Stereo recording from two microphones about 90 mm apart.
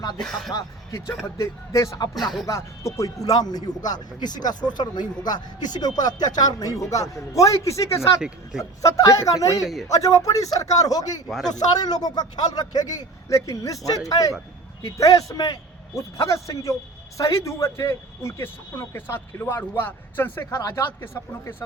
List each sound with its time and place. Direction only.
0.2 s music: centre (ahead or behind)
0.5 s a man's voice: 35° left (ahead or behind)
2.1 s music: centre (ahead or behind)
2.5 s a man's voice: 30° left (ahead or behind)
9.6 s music: 5° right (ahead or behind)
9.9 s a man's voice: 35° left (ahead or behind)
11.3 s music: centre (ahead or behind)
11.7 s a man's voice: 45° left (ahead or behind); by 20.4 s 25° left (ahead or behind)
20.4 s a man's voice: 35° left (ahead or behind)